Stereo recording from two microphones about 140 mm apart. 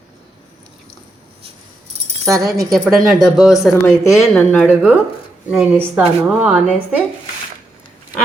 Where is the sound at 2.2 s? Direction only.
25° right (ahead or behind).